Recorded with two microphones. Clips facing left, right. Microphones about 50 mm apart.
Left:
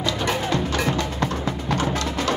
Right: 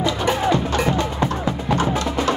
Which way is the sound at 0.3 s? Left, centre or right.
Right.